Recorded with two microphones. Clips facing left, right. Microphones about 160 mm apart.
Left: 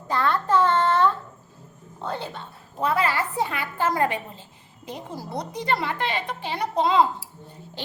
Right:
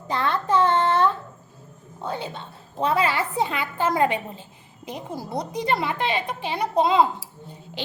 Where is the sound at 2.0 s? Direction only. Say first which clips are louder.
Right 1 dB; 15° right (ahead or behind).